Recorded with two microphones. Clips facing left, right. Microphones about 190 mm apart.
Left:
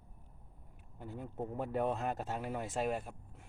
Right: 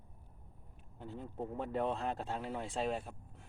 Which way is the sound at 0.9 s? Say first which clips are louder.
Left 1 dB; 10° left (ahead or behind).